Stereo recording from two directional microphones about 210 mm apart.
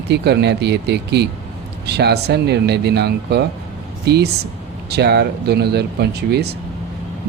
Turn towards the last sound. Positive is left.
turn(degrees=-50)  # may be behind; listen again after turning